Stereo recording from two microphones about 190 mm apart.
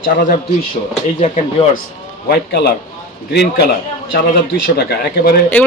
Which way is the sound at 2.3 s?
55° left (ahead or behind).